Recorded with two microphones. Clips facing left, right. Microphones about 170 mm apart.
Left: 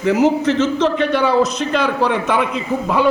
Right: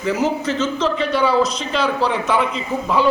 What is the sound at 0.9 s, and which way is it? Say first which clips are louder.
A man's voice: even; 55° left (ahead or behind).